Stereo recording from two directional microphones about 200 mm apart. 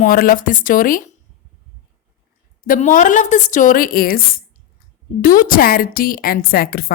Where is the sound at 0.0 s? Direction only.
45° left (ahead or behind).